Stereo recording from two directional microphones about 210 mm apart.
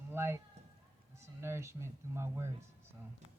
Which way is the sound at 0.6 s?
30° right (ahead or behind).